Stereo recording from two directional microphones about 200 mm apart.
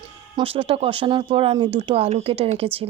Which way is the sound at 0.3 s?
30° right (ahead or behind).